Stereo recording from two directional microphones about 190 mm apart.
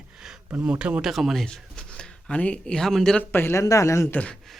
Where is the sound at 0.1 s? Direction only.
5° right (ahead or behind).